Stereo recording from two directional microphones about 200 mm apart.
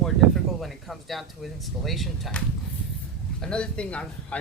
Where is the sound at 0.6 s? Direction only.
Centre (ahead or behind).